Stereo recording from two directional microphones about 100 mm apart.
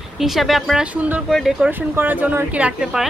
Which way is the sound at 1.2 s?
Centre (ahead or behind).